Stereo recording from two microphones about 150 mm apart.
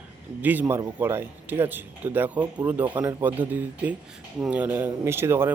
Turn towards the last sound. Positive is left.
turn(degrees=-15)  # may be behind; listen again after turning